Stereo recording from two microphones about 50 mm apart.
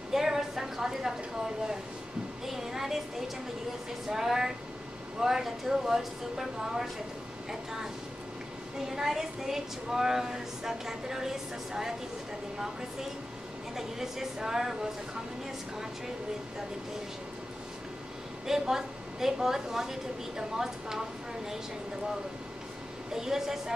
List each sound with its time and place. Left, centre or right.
0.1 s a sound: centre
2.4 s a sound: centre
4.1 s a woman's voice: centre
8.8 s a woman's voice: centre
13.7 s a woman's voice: centre
18.5 s a woman's voice: centre
23.1 s a woman's voice: centre